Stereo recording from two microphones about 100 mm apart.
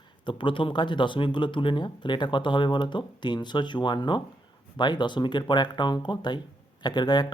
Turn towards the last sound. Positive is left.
turn(degrees=45)  # may be behind; listen again after turning